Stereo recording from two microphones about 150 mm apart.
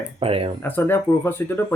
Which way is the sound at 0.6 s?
15° left (ahead or behind).